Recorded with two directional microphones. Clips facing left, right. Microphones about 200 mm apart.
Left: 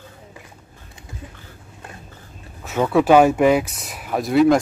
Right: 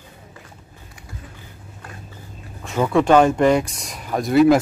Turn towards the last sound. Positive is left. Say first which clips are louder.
# right 1 dB
turn(degrees=0)  # may be behind; listen again after turning